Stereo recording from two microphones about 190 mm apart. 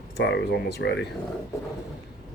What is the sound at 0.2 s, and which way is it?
Speech, 65° left (ahead or behind).